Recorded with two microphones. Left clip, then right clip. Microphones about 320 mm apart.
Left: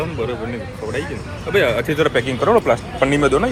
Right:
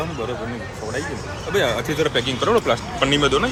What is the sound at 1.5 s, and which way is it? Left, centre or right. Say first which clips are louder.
Speech: left 4 dB; centre.